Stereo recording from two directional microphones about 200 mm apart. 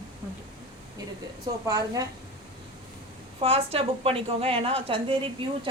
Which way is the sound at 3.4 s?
30° right (ahead or behind).